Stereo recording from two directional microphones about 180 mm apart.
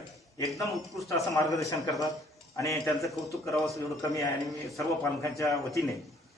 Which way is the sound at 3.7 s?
20° left (ahead or behind).